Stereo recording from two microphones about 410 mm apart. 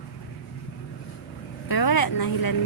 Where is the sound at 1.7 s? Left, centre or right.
Left.